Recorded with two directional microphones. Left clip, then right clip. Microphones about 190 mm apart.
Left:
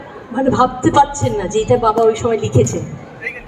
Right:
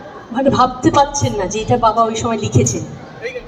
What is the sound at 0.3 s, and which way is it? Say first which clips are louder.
A man's voice: right 1 dB; 45° right (ahead or behind).